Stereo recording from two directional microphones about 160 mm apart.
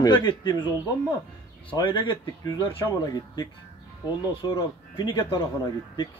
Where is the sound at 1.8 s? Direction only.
25° left (ahead or behind).